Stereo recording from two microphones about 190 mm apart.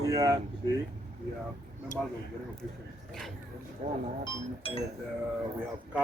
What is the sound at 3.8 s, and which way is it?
Speech, 40° right (ahead or behind).